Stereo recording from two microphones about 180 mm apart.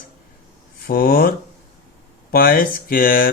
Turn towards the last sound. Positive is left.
turn(degrees=55)  # may be behind; listen again after turning